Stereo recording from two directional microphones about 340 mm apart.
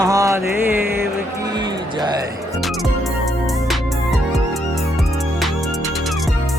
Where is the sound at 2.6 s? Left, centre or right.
Centre.